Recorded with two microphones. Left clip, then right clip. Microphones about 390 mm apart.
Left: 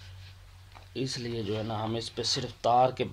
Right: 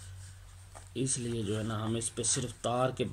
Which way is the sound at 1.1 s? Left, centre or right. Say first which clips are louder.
Left 2 dB; left.